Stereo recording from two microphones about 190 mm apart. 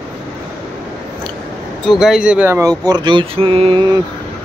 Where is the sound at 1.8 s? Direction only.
Centre (ahead or behind); by 3.8 s 30° right (ahead or behind).